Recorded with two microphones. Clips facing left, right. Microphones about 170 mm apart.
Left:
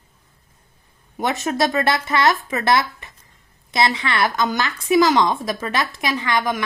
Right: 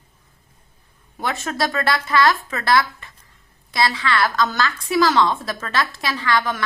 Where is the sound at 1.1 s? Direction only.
20° left (ahead or behind).